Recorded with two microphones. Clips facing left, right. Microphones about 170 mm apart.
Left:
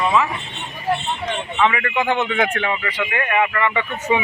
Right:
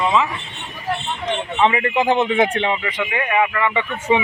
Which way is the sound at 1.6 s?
30° right (ahead or behind).